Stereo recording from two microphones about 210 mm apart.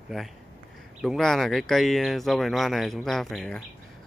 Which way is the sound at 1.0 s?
Centre (ahead or behind).